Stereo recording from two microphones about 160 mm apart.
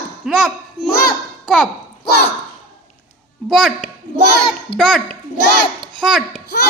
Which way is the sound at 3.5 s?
Centre (ahead or behind).